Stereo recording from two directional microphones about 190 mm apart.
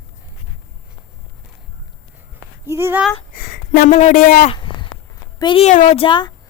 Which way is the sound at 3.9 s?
35° left (ahead or behind).